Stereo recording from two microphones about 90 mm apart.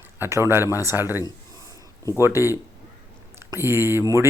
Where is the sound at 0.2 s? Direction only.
30° right (ahead or behind).